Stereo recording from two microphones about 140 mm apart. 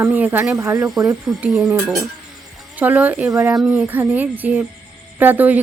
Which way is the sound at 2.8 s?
10° right (ahead or behind).